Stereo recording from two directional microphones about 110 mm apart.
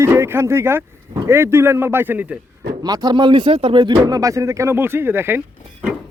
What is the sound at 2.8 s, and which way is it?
Speech, 35° right (ahead or behind).